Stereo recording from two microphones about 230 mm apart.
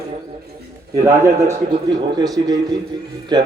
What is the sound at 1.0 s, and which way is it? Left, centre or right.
A man's voice, centre.